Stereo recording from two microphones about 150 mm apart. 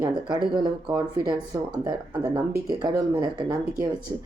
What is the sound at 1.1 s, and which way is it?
Speech, 25° right (ahead or behind).